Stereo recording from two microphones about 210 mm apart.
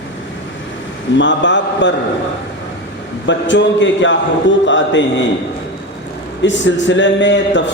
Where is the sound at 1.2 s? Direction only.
60° left (ahead or behind).